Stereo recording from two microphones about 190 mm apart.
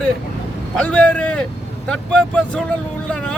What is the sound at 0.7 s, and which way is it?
Speech, 5° left (ahead or behind).